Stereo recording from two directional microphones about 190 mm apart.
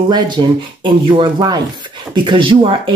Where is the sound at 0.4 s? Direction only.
25° right (ahead or behind).